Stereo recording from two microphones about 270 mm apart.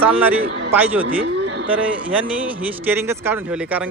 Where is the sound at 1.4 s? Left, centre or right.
Right.